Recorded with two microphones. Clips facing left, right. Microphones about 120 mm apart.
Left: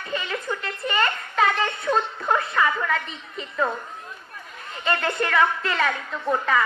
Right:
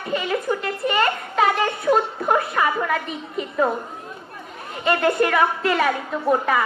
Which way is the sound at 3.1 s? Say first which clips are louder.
Right 8 dB; 30° left (ahead or behind).